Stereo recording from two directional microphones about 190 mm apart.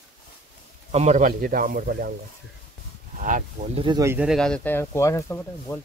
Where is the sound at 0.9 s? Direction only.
40° right (ahead or behind).